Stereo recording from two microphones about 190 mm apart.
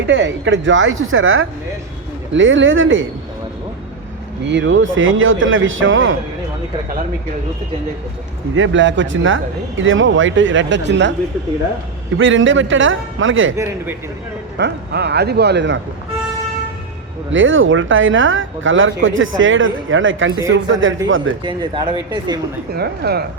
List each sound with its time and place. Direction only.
0.1 s speech: 75° right (ahead or behind)
4.4 s speech: 70° right (ahead or behind); by 6.1 s 90° right
8.5 s speech: 85° right; by 11.1 s 70° right (ahead or behind)
12.1 s speech: 90° right
14.6 s speech: 60° right (ahead or behind)
17.3 s speech: 90° right
21.4 s speech: 25° right (ahead or behind)
22.7 s speech: 55° right (ahead or behind)